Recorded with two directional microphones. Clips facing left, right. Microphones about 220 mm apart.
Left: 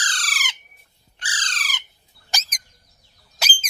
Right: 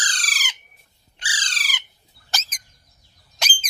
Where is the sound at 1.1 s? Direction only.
10° right (ahead or behind).